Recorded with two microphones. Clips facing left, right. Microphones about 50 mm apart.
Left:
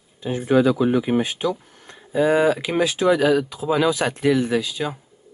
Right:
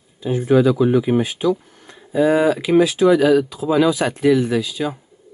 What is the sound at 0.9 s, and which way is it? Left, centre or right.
Speech, left.